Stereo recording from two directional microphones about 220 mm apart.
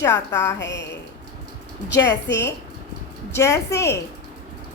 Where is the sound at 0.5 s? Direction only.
55° left (ahead or behind).